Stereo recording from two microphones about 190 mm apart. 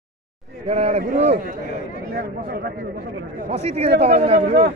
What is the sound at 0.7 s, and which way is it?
Speech, 40° right (ahead or behind).